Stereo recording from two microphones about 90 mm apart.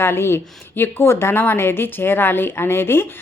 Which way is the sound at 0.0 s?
25° left (ahead or behind).